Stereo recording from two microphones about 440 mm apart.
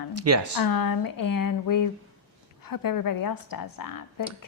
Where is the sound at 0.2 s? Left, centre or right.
Right.